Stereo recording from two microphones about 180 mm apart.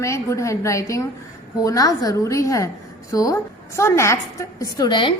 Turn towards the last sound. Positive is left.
turn(degrees=25)  # may be behind; listen again after turning